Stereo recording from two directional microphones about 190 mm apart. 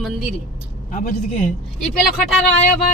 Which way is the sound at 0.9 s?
45° left (ahead or behind).